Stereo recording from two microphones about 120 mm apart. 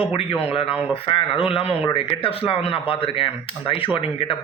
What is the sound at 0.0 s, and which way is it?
Speech, 50° left (ahead or behind).